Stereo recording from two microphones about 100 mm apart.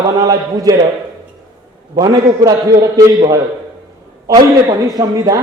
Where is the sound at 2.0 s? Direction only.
40° right (ahead or behind).